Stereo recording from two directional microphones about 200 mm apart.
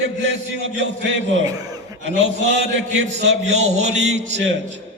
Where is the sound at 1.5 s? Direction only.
20° right (ahead or behind).